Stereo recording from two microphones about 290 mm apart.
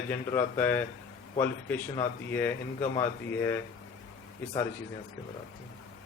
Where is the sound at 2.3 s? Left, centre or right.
Centre.